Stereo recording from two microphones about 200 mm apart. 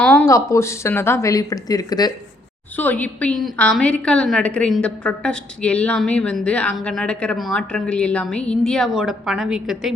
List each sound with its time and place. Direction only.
0.0 s speech: 10° left (ahead or behind)
2.7 s a woman's voice: 10° left (ahead or behind)